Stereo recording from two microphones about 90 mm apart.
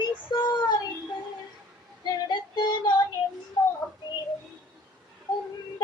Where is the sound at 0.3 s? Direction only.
55° left (ahead or behind).